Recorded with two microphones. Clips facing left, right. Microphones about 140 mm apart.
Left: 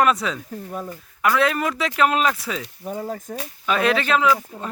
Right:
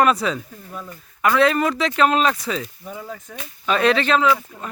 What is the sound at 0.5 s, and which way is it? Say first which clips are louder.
Speech: left 5 dB; 40° left (ahead or behind).